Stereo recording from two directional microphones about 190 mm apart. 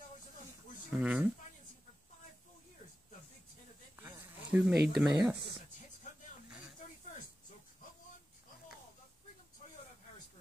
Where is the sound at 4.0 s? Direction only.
10° right (ahead or behind).